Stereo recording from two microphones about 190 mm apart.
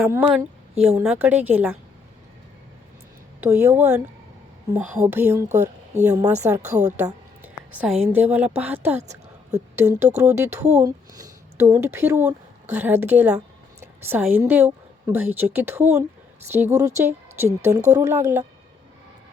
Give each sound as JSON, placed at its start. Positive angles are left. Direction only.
{"t": 0.0, "sound": "a woman's voice", "side_deg": -10}
{"t": 3.4, "sound": "a woman's voice", "side_deg": -10}
{"t": 6.6, "sound": "speech", "side_deg": -35}
{"t": 7.0, "sound": "a sound", "side_deg": -10}
{"t": 8.1, "sound": "a woman's voice", "side_deg": -10}
{"t": 9.0, "sound": "a sound", "side_deg": -35}
{"t": 9.7, "sound": "a woman's voice", "side_deg": -15}
{"t": 10.6, "sound": "speech", "side_deg": -35}
{"t": 10.8, "sound": "a woman's voice", "side_deg": -15}